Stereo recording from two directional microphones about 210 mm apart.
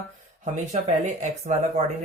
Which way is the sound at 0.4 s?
35° right (ahead or behind).